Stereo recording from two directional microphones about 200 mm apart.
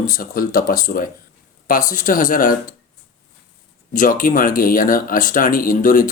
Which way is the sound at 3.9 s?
40° left (ahead or behind).